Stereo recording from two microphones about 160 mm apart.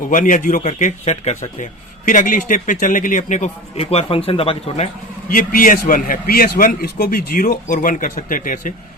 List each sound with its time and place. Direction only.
0.1 s speech: 55° left (ahead or behind)
2.0 s speech: 55° left (ahead or behind); by 4.9 s 40° left (ahead or behind)
5.3 s a man's voice: 60° left (ahead or behind)